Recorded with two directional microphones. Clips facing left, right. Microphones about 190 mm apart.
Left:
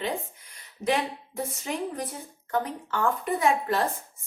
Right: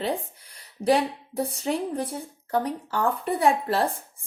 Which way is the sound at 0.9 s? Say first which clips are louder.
Right 5 dB; 35° right (ahead or behind).